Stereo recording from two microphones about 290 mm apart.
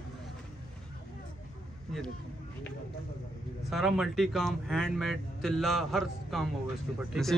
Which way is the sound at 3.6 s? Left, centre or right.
Centre.